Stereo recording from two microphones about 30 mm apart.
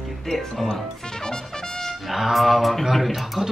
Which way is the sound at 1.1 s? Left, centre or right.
Left.